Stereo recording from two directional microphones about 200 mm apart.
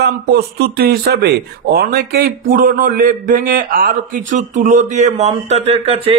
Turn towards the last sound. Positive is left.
turn(degrees=-30)  # may be behind; listen again after turning